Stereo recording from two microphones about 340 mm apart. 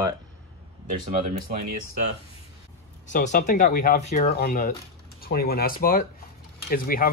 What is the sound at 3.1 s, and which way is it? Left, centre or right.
Speech, left.